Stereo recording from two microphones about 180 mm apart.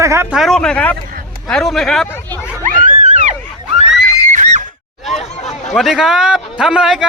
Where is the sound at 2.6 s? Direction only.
45° right (ahead or behind).